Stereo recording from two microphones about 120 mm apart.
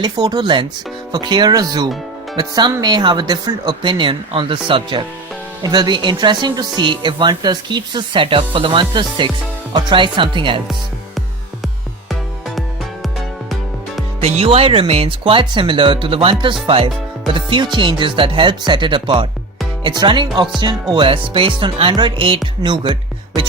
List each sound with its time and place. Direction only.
0.0 s speech: 35° right (ahead or behind)
14.2 s speech: 55° right (ahead or behind); by 23.0 s 40° right (ahead or behind)